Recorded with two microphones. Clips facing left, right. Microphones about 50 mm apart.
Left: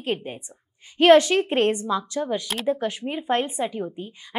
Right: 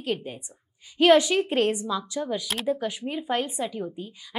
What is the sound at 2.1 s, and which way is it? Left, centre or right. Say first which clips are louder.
Speech: left 3 dB; left.